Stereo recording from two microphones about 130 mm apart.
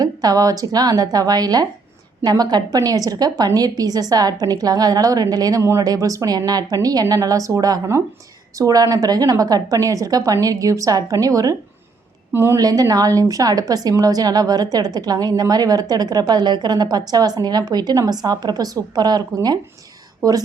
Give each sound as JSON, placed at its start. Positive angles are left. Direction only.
{"t": 0.0, "sound": "a woman's voice", "side_deg": -30}
{"t": 12.6, "sound": "a woman's voice", "side_deg": -30}